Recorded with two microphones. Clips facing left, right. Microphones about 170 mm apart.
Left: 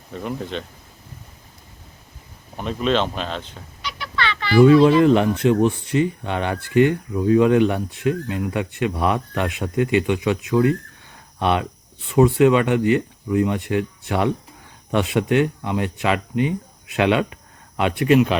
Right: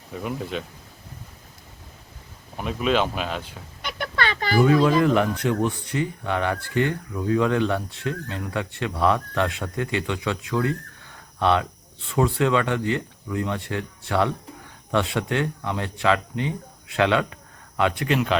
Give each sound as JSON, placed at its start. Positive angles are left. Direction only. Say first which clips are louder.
{"t": 0.1, "sound": "speech", "louder": "left 1 dB", "side_deg": -5}
{"t": 2.6, "sound": "speech", "louder": "left 2 dB", "side_deg": -10}
{"t": 3.8, "sound": "a sound", "louder": "even", "side_deg": -50}
{"t": 5.0, "sound": "speech", "louder": "left 5 dB", "side_deg": 25}